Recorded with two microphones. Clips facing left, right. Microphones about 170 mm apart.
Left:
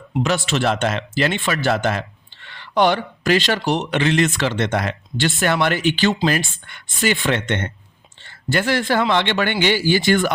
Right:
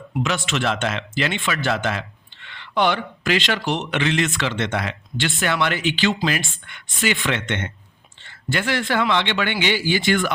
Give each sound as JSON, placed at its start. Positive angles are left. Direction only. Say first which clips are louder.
{"t": 0.2, "sound": "speech", "louder": "left 3 dB", "side_deg": 35}